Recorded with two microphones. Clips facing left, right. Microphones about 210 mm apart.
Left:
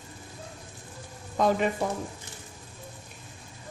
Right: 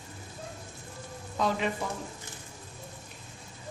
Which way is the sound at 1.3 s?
50° left (ahead or behind).